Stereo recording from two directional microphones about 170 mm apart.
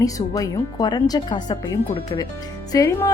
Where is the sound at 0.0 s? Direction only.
20° left (ahead or behind).